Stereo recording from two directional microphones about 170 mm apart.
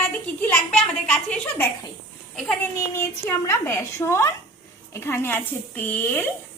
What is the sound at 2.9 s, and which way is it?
A woman's voice, 15° left (ahead or behind).